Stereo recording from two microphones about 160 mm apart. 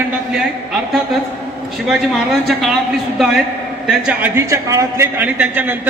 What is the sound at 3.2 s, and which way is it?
A man's voice, centre (ahead or behind).